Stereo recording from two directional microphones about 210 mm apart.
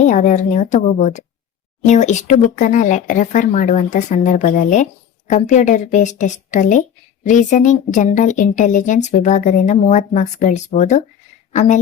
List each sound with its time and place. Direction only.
0.0 s a woman's voice: 35° left (ahead or behind)